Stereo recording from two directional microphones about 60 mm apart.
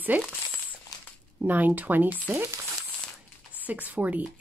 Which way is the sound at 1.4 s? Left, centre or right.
Right.